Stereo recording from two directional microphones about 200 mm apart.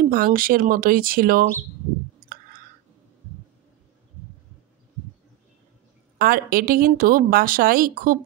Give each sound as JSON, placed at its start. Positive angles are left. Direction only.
{"t": 0.0, "sound": "a woman's voice", "side_deg": -45}
{"t": 2.1, "sound": "clicking", "side_deg": -45}
{"t": 6.1, "sound": "a woman's voice", "side_deg": -45}